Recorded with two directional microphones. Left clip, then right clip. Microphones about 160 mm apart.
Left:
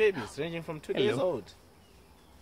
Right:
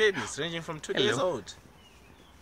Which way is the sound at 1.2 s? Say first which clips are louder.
Right 1 dB; 15° left (ahead or behind).